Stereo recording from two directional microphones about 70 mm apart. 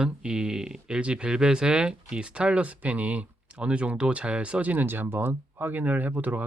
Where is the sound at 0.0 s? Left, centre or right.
Centre.